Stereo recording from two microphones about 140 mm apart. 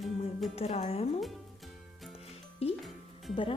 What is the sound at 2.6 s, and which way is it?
Speech, 45° left (ahead or behind).